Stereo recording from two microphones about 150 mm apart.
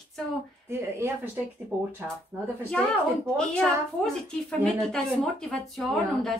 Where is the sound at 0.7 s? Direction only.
15° right (ahead or behind).